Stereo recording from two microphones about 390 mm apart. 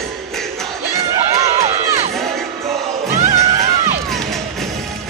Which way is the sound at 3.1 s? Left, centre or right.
Centre.